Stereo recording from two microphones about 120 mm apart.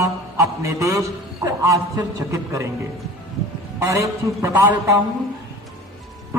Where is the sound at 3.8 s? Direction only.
25° right (ahead or behind).